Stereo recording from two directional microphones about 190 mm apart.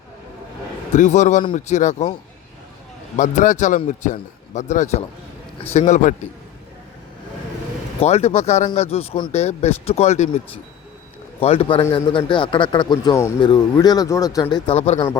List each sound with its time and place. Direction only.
0.9 s speech: 40° left (ahead or behind)
3.2 s speech: 40° left (ahead or behind)
8.0 s speech: 35° left (ahead or behind)
11.3 s a man's voice: 30° left (ahead or behind)
14.7 s speech: 35° left (ahead or behind)
14.9 s a man's voice: 20° left (ahead or behind)